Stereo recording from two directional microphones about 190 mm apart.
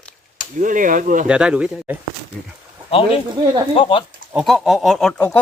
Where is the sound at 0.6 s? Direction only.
45° right (ahead or behind).